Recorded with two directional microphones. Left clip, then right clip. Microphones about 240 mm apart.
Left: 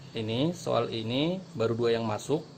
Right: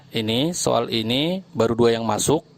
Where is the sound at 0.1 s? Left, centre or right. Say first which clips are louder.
Right 8 dB; right.